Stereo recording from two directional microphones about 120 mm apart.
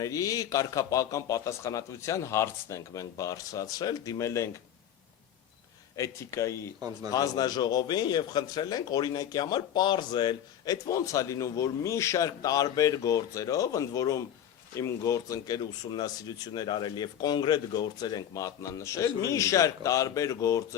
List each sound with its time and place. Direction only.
0.0 s speech: 30° left (ahead or behind)
6.0 s speech: 25° left (ahead or behind)
6.7 s a man's voice: 35° right (ahead or behind)
7.1 s a man's voice: 30° left (ahead or behind)